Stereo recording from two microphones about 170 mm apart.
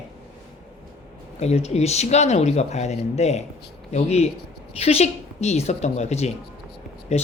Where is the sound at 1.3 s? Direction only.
40° left (ahead or behind).